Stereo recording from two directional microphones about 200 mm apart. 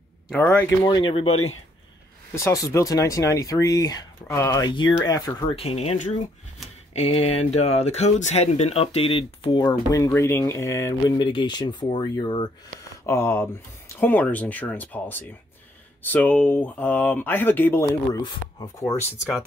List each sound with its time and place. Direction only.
0.3 s speech: 10° left (ahead or behind)
0.8 s speech: 25° left (ahead or behind)
2.3 s speech: 15° left (ahead or behind)
13.0 s speech: 10° left (ahead or behind)